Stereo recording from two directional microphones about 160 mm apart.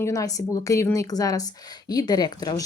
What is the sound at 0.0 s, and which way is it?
Speech, 20° left (ahead or behind).